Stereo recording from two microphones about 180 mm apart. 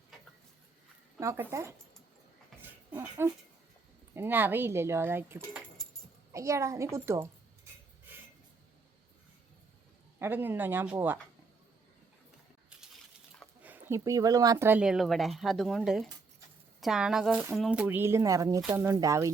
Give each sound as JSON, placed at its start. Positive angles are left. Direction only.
{"t": 1.2, "sound": "speech", "side_deg": -15}
{"t": 2.6, "sound": "a sound", "side_deg": -10}
{"t": 4.1, "sound": "speech", "side_deg": -10}
{"t": 6.9, "sound": "music", "side_deg": -15}
{"t": 10.2, "sound": "speech", "side_deg": -10}
{"t": 12.7, "sound": "coin", "side_deg": -5}
{"t": 13.6, "sound": "speech", "side_deg": -10}